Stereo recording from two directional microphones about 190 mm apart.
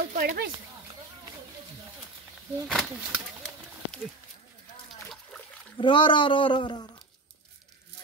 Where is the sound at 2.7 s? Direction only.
Centre (ahead or behind).